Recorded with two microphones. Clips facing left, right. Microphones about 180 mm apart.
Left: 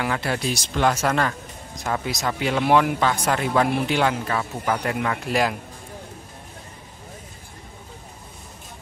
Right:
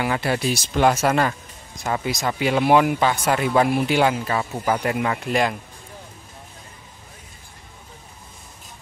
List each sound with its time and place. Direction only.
0.0 s speech: 5° right (ahead or behind)